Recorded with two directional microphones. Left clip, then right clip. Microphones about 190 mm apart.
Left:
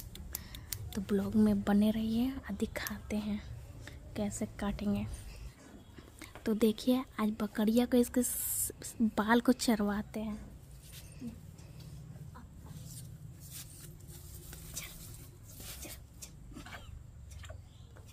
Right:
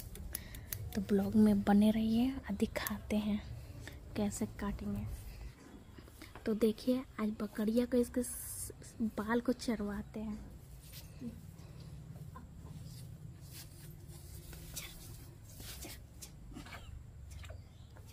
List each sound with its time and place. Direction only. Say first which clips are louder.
0.3 s a sound: left 4 dB; centre (ahead or behind)
1.3 s speech: even; centre (ahead or behind)
6.1 s speech: left 2 dB; 20° left (ahead or behind); by 10.3 s 55° left (ahead or behind)
15.8 s vehicle: left 2 dB; centre (ahead or behind)